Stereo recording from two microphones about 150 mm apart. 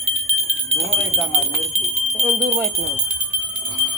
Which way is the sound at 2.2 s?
55° right (ahead or behind).